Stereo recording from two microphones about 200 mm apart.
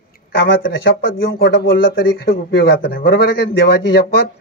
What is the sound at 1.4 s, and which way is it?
Speech, 50° left (ahead or behind).